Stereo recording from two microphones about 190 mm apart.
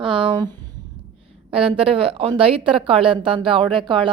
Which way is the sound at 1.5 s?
30° right (ahead or behind).